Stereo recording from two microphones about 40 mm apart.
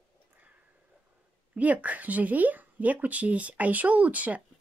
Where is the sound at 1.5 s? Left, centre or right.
Right.